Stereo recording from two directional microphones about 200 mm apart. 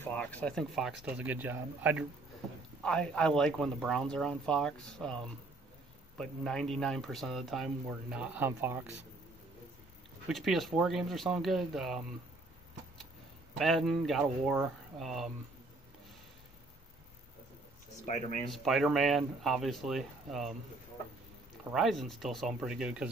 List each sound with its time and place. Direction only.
0.0 s speech: 5° left (ahead or behind); by 2.0 s 10° right (ahead or behind)
2.8 s speech: 5° left (ahead or behind)
6.1 s speech: centre (ahead or behind)
10.2 s speech: centre (ahead or behind)
13.6 s speech: centre (ahead or behind)
18.0 s speech: 35° left (ahead or behind)
18.5 s speech: centre (ahead or behind)
21.7 s speech: centre (ahead or behind)